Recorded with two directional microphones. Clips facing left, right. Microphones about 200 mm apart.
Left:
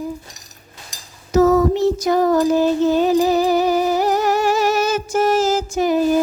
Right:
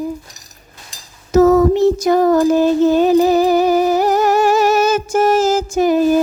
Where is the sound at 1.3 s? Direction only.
50° right (ahead or behind).